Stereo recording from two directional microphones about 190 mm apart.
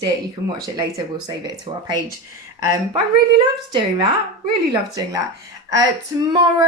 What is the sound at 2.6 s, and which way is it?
A woman's voice, 25° right (ahead or behind).